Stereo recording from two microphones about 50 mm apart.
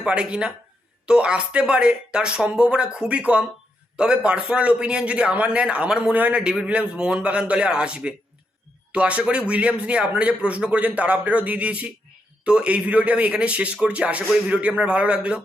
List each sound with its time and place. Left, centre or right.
0.0 s speech: right